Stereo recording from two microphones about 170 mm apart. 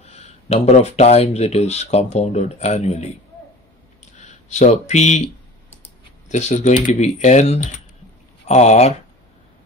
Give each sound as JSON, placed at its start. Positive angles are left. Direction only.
{"t": 0.0, "sound": "speech", "side_deg": 40}
{"t": 4.2, "sound": "speech", "side_deg": 45}
{"t": 6.3, "sound": "speech", "side_deg": 45}